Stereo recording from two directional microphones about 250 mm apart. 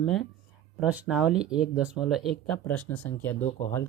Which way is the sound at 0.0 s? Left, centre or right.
Centre.